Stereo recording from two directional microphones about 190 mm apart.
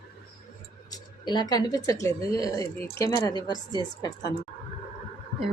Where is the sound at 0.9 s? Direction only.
20° left (ahead or behind).